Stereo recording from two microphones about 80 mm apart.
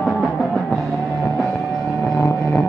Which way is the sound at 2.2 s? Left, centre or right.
Left.